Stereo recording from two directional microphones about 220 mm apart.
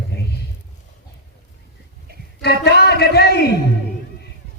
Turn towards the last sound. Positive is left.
turn(degrees=45)  # may be behind; listen again after turning